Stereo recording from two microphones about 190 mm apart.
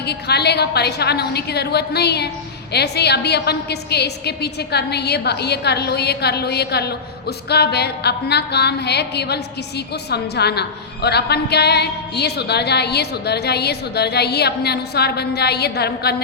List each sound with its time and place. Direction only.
0.0 s a woman's voice: 60° left (ahead or behind)